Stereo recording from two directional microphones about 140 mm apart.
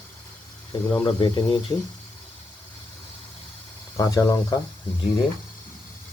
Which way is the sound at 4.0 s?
25° left (ahead or behind).